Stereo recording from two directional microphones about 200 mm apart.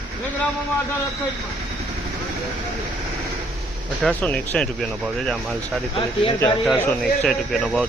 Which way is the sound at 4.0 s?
5° left (ahead or behind).